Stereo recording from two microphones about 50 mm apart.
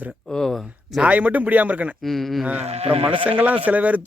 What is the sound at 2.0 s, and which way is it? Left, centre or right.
Speech, centre.